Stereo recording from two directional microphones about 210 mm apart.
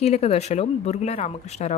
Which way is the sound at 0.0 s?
30° left (ahead or behind).